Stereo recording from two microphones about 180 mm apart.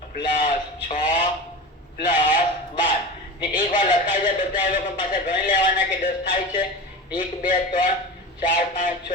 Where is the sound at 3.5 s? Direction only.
45° left (ahead or behind).